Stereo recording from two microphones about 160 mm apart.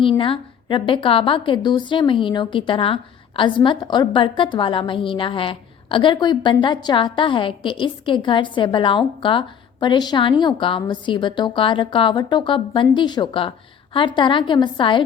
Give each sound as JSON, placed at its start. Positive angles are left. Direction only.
{"t": 0.0, "sound": "a woman's voice", "side_deg": 35}